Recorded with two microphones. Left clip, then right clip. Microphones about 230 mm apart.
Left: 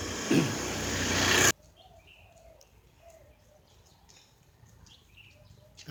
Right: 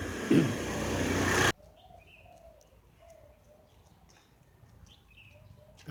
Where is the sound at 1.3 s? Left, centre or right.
Left.